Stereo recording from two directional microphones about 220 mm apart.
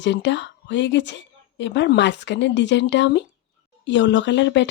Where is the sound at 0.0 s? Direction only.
55° left (ahead or behind).